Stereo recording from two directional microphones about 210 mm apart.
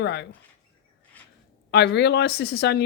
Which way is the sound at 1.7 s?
55° left (ahead or behind).